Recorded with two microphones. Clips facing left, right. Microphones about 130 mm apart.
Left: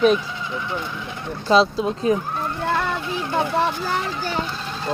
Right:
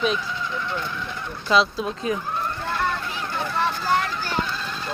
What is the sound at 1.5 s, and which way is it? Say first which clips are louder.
Speech: left 4 dB; 35° left (ahead or behind).